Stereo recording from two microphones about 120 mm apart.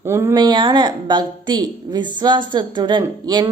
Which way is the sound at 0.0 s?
20° right (ahead or behind).